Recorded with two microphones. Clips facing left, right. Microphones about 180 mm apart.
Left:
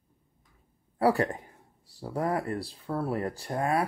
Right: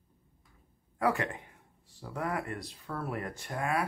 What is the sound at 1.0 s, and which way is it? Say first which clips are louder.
Speech: left 5 dB; 35° left (ahead or behind).